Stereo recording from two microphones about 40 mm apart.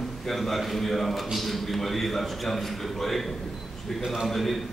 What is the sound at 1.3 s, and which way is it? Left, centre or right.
A man's voice, centre.